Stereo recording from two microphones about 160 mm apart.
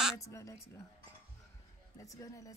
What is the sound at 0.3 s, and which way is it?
Speech, 20° left (ahead or behind).